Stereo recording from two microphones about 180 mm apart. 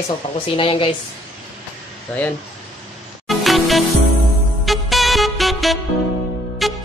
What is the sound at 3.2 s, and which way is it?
Music, centre (ahead or behind).